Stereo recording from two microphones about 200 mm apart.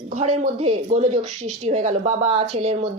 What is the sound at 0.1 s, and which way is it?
Speech, 35° right (ahead or behind).